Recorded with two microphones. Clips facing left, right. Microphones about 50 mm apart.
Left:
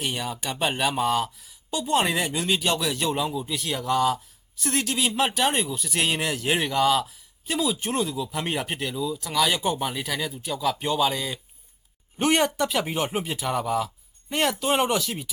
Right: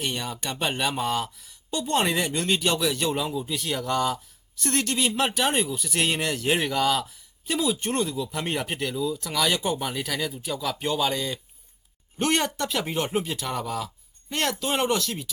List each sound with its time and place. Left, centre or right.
0.0 s speech: centre